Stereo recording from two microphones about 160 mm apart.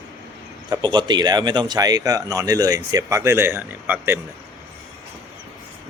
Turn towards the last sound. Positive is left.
turn(degrees=-10)  # may be behind; listen again after turning